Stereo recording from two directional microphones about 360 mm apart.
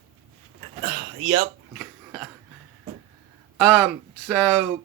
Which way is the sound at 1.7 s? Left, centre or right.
Centre.